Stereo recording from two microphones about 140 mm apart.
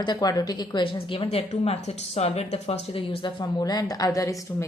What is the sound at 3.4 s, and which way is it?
Speech, 25° left (ahead or behind).